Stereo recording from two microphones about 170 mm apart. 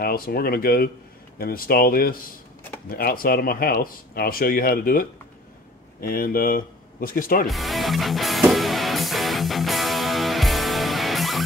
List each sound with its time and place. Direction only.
0.0 s speech: 60° left (ahead or behind)
7.4 s music: centre (ahead or behind)